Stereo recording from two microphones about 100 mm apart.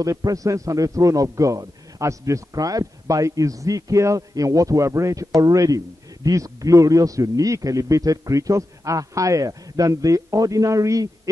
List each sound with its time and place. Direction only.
0.0 s a man's voice: 35° right (ahead or behind)